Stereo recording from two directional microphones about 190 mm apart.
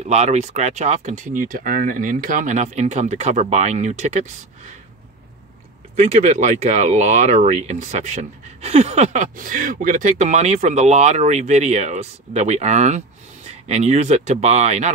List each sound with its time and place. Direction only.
0.0 s speech: 35° right (ahead or behind)
5.9 s speech: 40° right (ahead or behind)